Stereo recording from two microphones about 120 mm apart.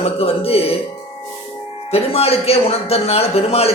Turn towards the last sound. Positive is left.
turn(degrees=55)  # may be behind; listen again after turning